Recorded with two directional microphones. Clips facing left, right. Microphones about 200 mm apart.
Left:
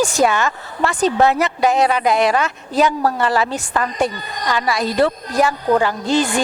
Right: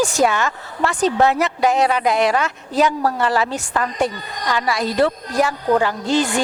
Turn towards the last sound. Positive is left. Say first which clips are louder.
# left 1 dB
turn(degrees=15)  # may be behind; listen again after turning